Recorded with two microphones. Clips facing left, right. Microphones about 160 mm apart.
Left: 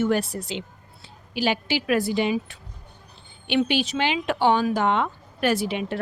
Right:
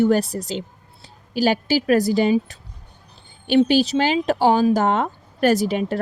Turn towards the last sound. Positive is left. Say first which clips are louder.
# right 5 dB
turn(degrees=-40)  # may be behind; listen again after turning